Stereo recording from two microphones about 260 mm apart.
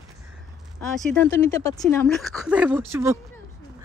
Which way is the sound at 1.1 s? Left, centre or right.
Centre.